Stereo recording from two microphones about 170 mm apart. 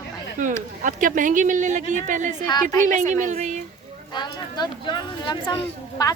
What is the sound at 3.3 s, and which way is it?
Speech, 45° right (ahead or behind).